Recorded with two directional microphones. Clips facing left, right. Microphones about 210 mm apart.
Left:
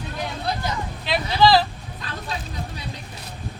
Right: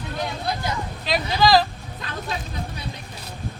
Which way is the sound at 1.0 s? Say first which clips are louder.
Left 2 dB; 40° right (ahead or behind).